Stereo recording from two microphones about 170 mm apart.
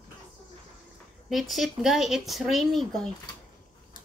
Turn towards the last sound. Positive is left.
turn(degrees=0)  # may be behind; listen again after turning